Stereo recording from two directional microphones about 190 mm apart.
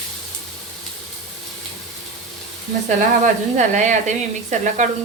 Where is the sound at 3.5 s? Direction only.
40° right (ahead or behind).